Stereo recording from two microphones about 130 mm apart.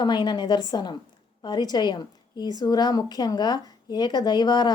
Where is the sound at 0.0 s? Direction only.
35° left (ahead or behind).